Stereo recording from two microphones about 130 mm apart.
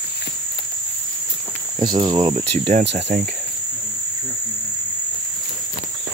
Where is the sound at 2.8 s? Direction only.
90° right.